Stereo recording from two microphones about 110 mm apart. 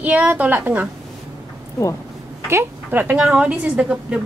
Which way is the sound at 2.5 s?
20° right (ahead or behind).